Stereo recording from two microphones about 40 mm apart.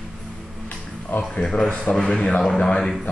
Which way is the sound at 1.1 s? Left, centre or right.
Left.